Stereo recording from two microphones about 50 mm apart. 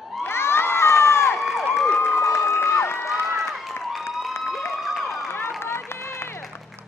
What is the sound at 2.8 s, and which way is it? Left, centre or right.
Cheering, left.